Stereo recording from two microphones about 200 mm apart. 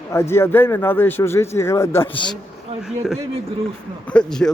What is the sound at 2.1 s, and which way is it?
Speech, 25° left (ahead or behind).